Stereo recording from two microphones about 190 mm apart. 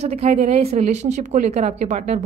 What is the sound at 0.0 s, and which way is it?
A woman's voice, 35° right (ahead or behind).